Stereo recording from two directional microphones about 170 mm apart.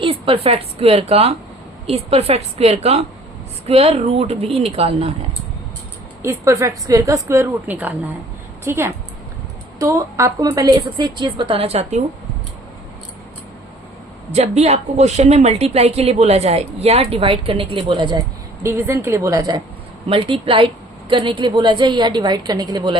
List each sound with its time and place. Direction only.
0.0 s a woman's voice: 35° right (ahead or behind)
6.2 s a woman's voice: 15° right (ahead or behind); by 12.0 s 40° right (ahead or behind)
14.3 s a woman's voice: 40° right (ahead or behind)
18.6 s a woman's voice: 15° right (ahead or behind)